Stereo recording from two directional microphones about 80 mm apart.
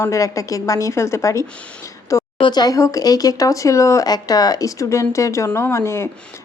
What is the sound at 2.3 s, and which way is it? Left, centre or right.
Speech, left.